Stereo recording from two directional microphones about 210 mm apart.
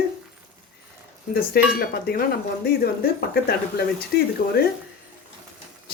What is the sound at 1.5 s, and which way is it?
Speech, 45° left (ahead or behind).